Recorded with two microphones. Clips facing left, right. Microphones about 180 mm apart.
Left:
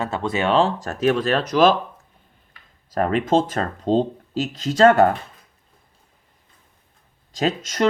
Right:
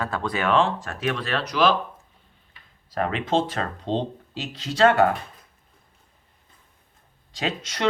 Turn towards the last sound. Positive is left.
turn(degrees=45)  # may be behind; listen again after turning